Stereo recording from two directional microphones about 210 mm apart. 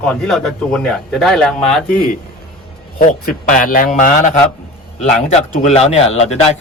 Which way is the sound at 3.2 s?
40° left (ahead or behind).